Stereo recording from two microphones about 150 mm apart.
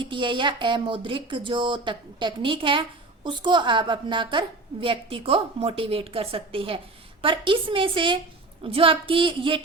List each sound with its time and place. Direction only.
0.0 s a woman's voice: 35° right (ahead or behind)